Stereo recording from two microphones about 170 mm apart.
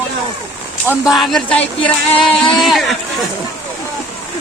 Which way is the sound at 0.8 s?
5° right (ahead or behind).